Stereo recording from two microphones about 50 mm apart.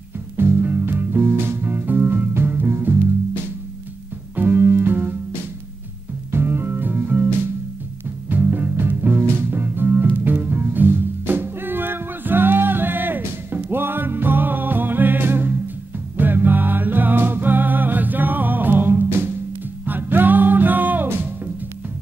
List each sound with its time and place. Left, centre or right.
0.4 s music: right
4.4 s music: right
6.3 s music: right
8.3 s music: right